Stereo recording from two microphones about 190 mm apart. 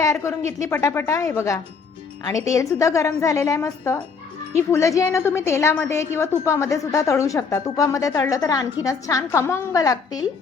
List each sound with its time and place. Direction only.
0.0 s a woman's voice: 15° left (ahead or behind)